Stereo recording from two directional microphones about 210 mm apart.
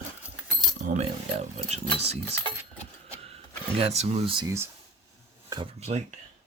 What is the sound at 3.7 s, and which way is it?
Speech, 30° right (ahead or behind).